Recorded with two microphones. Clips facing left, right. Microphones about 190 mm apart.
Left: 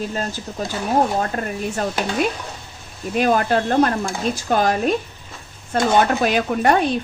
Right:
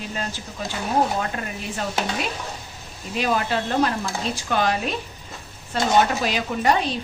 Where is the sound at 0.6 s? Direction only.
40° left (ahead or behind).